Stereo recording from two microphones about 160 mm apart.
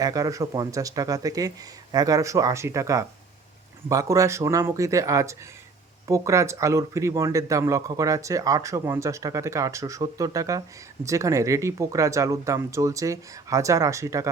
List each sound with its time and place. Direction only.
0.0 s speech: 20° right (ahead or behind)